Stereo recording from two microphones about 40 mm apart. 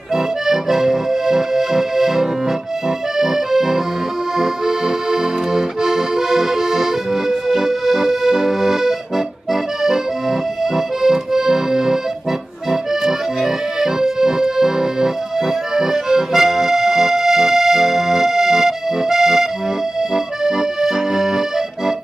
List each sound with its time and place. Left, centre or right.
0.1 s accordion: centre
11.0 s accordion: centre
13.0 s accordion: centre
20.4 s accordion: centre